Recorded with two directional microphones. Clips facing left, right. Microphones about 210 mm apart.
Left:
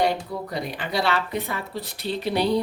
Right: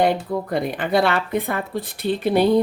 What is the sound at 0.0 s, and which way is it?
Speech, 50° right (ahead or behind).